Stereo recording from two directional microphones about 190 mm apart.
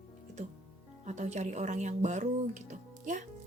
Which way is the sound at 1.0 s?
40° right (ahead or behind).